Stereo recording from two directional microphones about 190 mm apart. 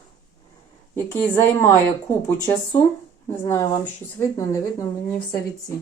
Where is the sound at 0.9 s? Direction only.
10° left (ahead or behind).